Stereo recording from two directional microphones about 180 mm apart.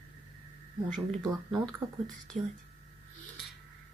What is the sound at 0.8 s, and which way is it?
Speech, 5° left (ahead or behind).